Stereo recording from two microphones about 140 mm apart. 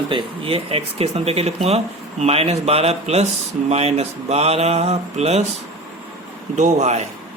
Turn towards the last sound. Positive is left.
turn(degrees=-55)  # may be behind; listen again after turning